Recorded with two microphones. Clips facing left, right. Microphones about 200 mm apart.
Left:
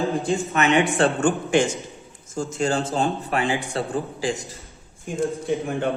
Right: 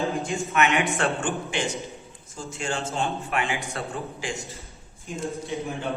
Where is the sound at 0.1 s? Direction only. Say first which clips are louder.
Left 5 dB; 35° left (ahead or behind).